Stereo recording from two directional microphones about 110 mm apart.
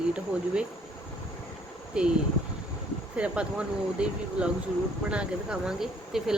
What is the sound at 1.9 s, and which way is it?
Speech, 10° right (ahead or behind).